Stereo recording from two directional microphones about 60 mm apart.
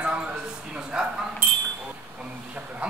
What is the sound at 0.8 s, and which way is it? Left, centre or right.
Bow-wow, centre.